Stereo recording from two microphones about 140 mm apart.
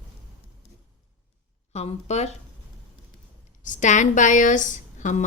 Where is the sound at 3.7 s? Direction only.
60° left (ahead or behind).